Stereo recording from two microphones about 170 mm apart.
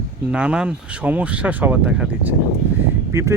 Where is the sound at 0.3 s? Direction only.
5° right (ahead or behind).